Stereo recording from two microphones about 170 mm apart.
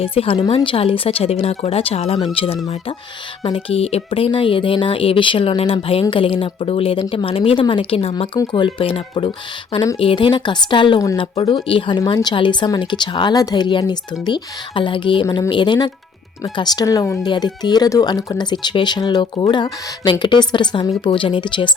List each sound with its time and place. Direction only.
0.0 s speech: 35° left (ahead or behind)